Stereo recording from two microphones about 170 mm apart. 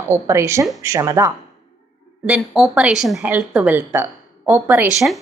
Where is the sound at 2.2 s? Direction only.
5° right (ahead or behind).